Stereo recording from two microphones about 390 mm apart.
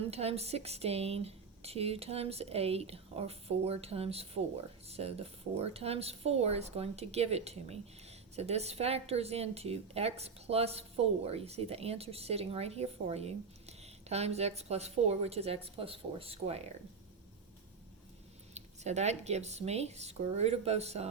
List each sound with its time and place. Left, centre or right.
0.1 s speech: centre
18.5 s speech: centre